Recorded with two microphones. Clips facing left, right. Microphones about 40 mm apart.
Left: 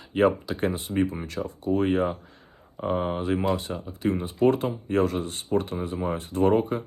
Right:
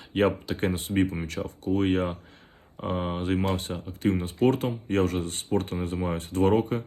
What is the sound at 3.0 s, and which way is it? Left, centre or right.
Speech, centre.